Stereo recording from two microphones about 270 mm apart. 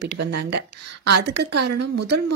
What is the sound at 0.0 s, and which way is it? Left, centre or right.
Speech, right.